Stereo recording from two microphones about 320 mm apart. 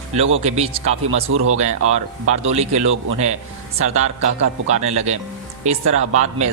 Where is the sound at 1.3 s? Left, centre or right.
Right.